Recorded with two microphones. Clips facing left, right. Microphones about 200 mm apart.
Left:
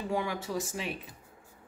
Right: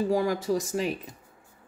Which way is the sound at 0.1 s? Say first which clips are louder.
Right 7 dB; 40° right (ahead or behind).